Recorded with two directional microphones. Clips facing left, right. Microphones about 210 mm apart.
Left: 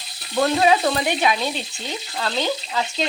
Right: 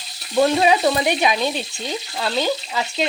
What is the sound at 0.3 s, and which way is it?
A woman's voice, 15° right (ahead or behind).